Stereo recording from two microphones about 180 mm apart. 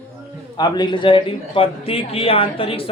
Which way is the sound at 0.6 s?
25° left (ahead or behind).